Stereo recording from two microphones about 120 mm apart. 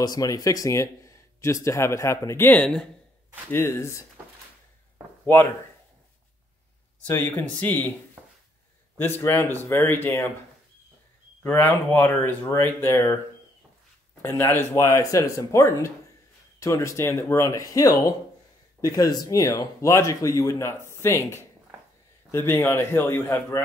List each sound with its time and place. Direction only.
0.0 s speech: 30° left (ahead or behind); by 2.9 s 5° left (ahead or behind)
3.5 s speech: 20° left (ahead or behind)
5.2 s speech: 15° left (ahead or behind)
7.1 s speech: 15° left (ahead or behind)
8.9 s speech: 20° left (ahead or behind)
11.4 s speech: 20° left (ahead or behind)
14.2 s speech: 20° left (ahead or behind)